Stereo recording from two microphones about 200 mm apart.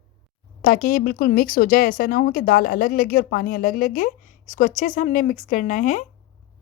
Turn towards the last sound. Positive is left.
turn(degrees=40)  # may be behind; listen again after turning